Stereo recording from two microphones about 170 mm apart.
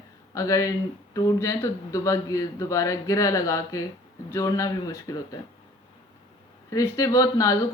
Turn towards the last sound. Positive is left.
turn(degrees=20)  # may be behind; listen again after turning